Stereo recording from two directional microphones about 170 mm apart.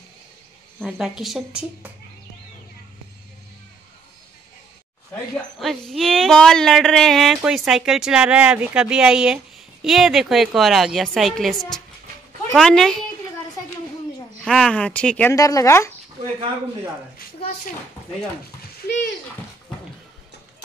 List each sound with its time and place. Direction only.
0.8 s speech: centre (ahead or behind)
5.6 s speech: centre (ahead or behind)
14.4 s speech: 5° left (ahead or behind)
15.3 s speech: 20° left (ahead or behind)